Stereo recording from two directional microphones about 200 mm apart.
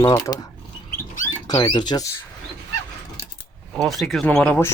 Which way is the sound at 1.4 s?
20° left (ahead or behind).